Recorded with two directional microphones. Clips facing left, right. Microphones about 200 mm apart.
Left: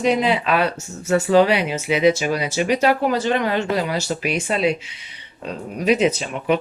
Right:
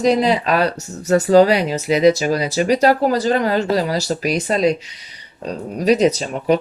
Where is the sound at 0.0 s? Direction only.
40° right (ahead or behind).